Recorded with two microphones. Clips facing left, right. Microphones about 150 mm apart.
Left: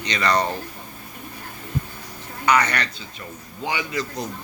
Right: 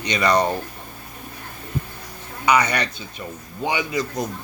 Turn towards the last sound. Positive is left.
turn(degrees=-15)  # may be behind; listen again after turning